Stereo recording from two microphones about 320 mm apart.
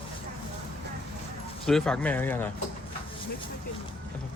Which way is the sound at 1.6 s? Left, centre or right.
Centre.